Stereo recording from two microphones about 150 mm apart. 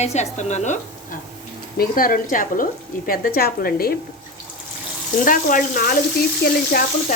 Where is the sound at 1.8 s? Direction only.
70° left (ahead or behind).